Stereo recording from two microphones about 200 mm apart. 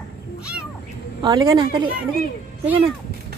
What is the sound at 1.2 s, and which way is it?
Speech, 20° right (ahead or behind).